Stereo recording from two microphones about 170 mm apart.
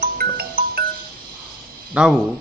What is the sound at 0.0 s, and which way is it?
Music, 60° right (ahead or behind).